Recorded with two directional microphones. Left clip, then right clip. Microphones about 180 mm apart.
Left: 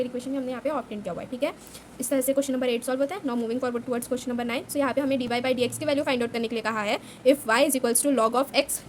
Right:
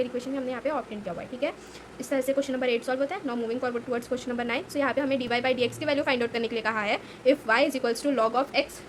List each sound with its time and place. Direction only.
0.0 s speech: 25° left (ahead or behind); by 8.6 s 40° left (ahead or behind)